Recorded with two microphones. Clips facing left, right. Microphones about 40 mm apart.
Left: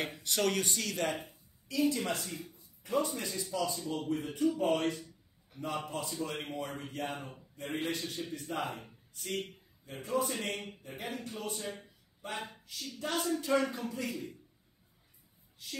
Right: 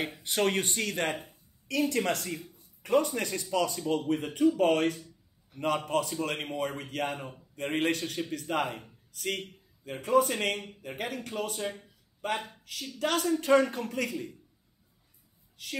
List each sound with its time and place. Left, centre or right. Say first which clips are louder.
0.2 s speech: right 4 dB; right
1.1 s a man's voice: right 1 dB; right
1.7 s a man's voice: right 3 dB; right
15.6 s speech: right 5 dB; right